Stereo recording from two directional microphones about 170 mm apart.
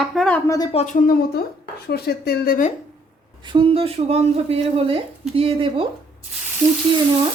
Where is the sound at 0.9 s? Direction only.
60° left (ahead or behind).